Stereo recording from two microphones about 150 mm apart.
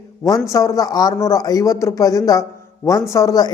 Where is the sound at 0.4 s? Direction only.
20° left (ahead or behind).